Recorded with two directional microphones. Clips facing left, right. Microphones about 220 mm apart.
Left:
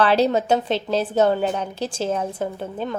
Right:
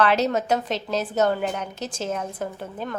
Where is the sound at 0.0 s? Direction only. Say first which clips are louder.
Left 3 dB; 30° left (ahead or behind).